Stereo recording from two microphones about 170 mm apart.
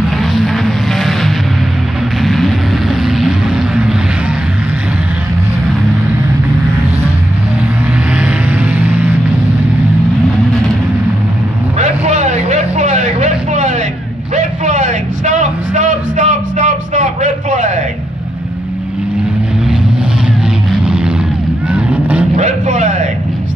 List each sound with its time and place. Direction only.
0.9 s music: centre (ahead or behind)
2.2 s vehicle: centre (ahead or behind)
8.7 s music: 10° right (ahead or behind)
11.8 s vehicle: 40° right (ahead or behind)
14.3 s a sound: 45° right (ahead or behind)
20.8 s vehicle: 5° right (ahead or behind)
22.4 s a sound: 45° right (ahead or behind)